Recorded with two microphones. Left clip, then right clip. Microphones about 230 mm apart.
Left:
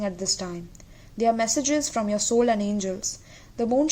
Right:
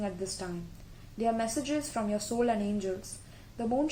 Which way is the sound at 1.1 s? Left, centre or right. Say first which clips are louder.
Left 8 dB; left.